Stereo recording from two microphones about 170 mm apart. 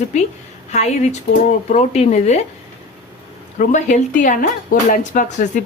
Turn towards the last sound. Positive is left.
turn(degrees=50)  # may be behind; listen again after turning